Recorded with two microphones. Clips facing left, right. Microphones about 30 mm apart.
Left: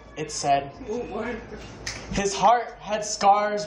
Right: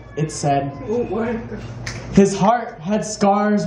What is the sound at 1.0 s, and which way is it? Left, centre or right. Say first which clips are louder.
Speech: right 10 dB; right.